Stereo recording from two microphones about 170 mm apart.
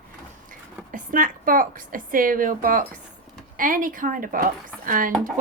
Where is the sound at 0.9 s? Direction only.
55° right (ahead or behind).